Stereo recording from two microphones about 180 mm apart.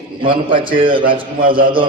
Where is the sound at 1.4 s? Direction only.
55° right (ahead or behind).